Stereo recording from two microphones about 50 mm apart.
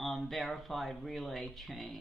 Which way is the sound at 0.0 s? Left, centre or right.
Centre.